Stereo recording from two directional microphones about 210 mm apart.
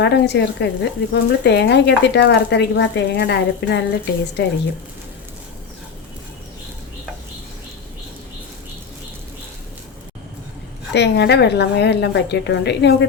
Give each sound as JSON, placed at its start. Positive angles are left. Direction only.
{"t": 0.0, "sound": "speech", "side_deg": 55}
{"t": 10.9, "sound": "a woman's voice", "side_deg": 55}